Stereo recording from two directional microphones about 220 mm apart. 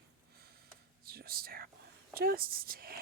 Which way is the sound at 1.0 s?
45° right (ahead or behind).